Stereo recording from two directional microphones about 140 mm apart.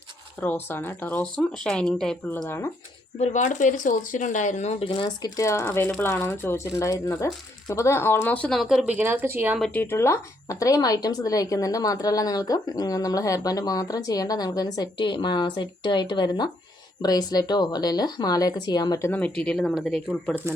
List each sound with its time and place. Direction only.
0.3 s speech: 15° left (ahead or behind)
3.2 s speech: 60° left (ahead or behind)
4.9 s speech: 35° left (ahead or behind); by 8.8 s 5° left (ahead or behind)
8.8 s speech: 10° right (ahead or behind)
9.6 s speech: 5° left (ahead or behind)
9.8 s speech: 20° left (ahead or behind)
19.1 s speech: 10° left (ahead or behind)